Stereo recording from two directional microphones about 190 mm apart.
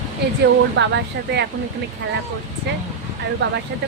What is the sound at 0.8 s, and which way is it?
Speech, 65° right (ahead or behind).